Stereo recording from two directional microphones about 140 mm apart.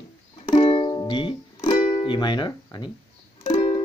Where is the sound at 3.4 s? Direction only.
35° left (ahead or behind).